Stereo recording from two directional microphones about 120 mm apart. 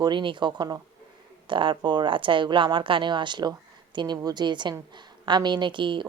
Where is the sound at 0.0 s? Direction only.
40° right (ahead or behind).